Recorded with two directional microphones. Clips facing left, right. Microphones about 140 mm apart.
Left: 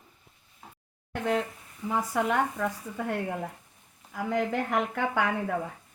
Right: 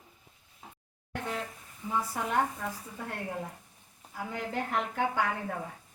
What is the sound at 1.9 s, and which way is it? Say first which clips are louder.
Speech: left 5 dB; 85° left.